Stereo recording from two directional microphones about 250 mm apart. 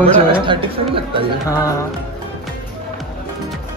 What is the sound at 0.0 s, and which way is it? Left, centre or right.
Speech, centre.